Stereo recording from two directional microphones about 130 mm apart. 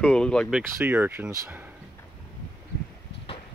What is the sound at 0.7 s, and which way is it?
Speech, 15° right (ahead or behind).